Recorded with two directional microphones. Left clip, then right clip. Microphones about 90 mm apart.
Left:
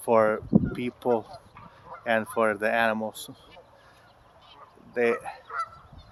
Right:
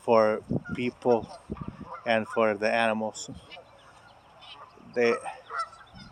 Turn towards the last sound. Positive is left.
turn(degrees=0)  # may be behind; listen again after turning